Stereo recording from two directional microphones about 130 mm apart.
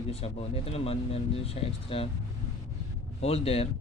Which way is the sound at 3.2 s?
50° left (ahead or behind).